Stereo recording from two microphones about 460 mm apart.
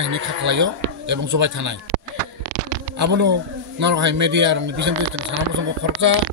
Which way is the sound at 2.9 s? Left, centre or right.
Right.